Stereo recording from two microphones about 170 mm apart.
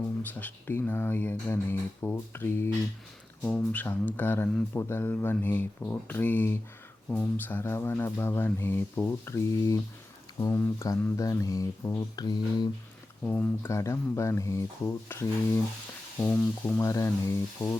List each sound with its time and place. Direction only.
0.2 s speech: 10° left (ahead or behind)
13.2 s speech: 10° left (ahead or behind)